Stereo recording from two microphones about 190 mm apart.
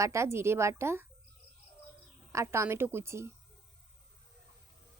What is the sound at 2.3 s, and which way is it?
A woman's voice, 15° right (ahead or behind).